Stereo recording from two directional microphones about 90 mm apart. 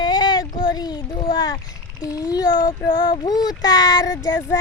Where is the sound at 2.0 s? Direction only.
40° left (ahead or behind).